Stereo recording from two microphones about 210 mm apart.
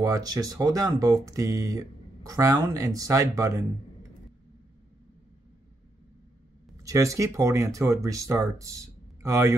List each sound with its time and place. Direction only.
0.0 s speech: 15° right (ahead or behind)
6.8 s speech: 15° right (ahead or behind)